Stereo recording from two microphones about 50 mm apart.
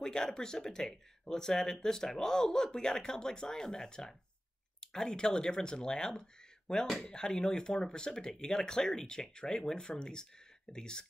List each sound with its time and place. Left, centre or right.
0.0 s speech: centre